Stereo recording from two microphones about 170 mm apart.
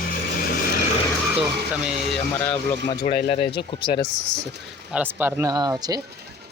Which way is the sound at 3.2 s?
30° left (ahead or behind).